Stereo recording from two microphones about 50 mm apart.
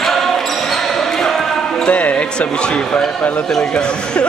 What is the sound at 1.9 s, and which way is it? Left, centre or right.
Speech, left.